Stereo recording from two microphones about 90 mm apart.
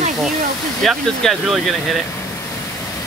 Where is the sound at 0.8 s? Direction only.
5° left (ahead or behind).